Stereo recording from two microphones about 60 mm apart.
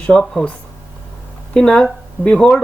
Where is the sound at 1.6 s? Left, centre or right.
Centre.